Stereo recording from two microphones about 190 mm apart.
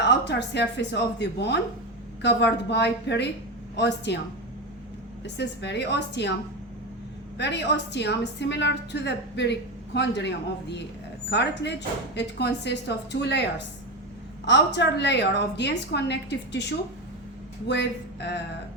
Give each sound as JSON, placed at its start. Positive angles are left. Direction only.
{"t": 0.3, "sound": "a woman's voice", "side_deg": 65}
{"t": 5.2, "sound": "a woman's voice", "side_deg": 65}
{"t": 7.3, "sound": "a woman's voice", "side_deg": 65}
{"t": 17.7, "sound": "a woman's voice", "side_deg": 65}